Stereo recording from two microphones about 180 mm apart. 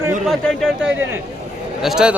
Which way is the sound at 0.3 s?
Centre (ahead or behind).